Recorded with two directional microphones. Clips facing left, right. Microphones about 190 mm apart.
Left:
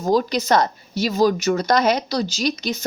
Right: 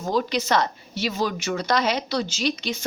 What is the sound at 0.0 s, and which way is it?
A woman's voice, 40° left (ahead or behind).